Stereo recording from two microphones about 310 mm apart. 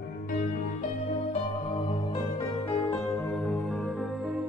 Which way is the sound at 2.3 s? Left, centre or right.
Centre.